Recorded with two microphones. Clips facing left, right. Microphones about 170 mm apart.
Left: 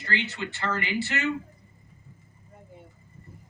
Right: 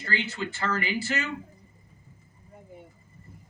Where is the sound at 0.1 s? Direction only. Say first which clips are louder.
Even; 40° right (ahead or behind).